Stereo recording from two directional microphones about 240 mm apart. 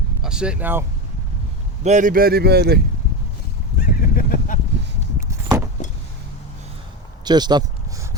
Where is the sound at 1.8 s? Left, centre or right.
Right.